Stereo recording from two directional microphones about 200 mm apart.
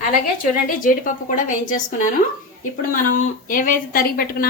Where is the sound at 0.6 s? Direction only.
45° left (ahead or behind).